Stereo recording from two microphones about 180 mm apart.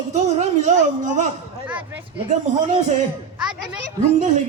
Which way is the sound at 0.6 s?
40° right (ahead or behind).